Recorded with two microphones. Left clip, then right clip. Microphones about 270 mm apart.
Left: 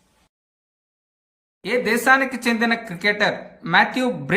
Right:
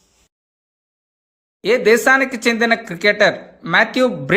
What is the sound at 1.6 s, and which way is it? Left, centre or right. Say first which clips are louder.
A man's voice: right 7 dB; centre.